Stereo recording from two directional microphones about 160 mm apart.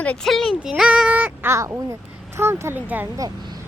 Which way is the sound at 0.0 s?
5° left (ahead or behind).